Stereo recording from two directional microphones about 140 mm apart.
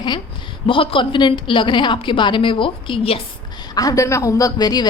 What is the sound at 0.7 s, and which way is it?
A woman's voice, 35° left (ahead or behind).